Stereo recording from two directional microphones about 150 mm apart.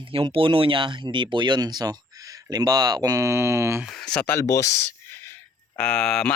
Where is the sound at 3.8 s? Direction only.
5° left (ahead or behind).